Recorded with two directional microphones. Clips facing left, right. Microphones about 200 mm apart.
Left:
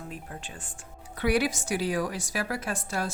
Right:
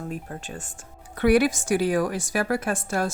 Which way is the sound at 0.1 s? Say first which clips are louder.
Right 7 dB; 45° right (ahead or behind).